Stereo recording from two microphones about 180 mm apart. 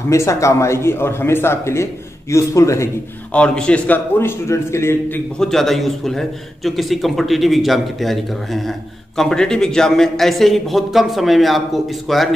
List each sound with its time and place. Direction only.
0.1 s a man's voice: 15° left (ahead or behind)
3.3 s a man's voice: 5° left (ahead or behind)
5.4 s a man's voice: centre (ahead or behind)